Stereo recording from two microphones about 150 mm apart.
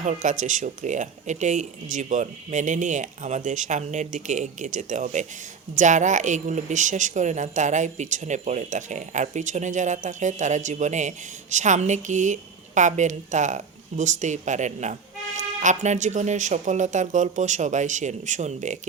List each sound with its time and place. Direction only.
0.0 s a woman's voice: 55° right (ahead or behind)